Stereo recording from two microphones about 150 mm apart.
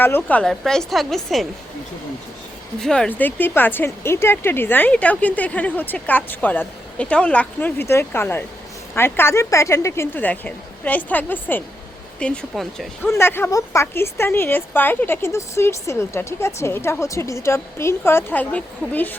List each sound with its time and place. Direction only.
0.0 s a woman's voice: 15° left (ahead or behind)
2.7 s a woman's voice: 5° left (ahead or behind)
13.0 s a woman's voice: 15° left (ahead or behind)